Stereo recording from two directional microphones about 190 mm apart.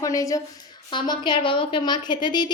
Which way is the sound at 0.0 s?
15° left (ahead or behind).